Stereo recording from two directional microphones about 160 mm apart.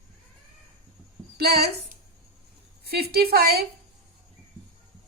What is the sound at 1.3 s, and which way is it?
A woman's voice, 85° right.